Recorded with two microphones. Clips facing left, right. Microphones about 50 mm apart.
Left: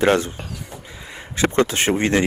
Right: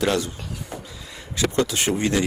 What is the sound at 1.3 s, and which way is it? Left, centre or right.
Speech, left.